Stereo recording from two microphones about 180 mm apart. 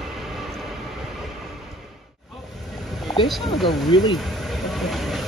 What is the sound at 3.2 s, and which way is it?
Speech, centre (ahead or behind).